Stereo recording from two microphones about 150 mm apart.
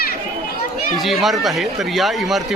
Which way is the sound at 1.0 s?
Centre (ahead or behind).